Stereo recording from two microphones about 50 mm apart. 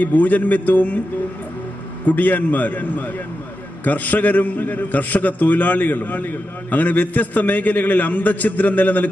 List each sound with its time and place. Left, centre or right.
0.0 s a man's voice: left
2.0 s a man's voice: left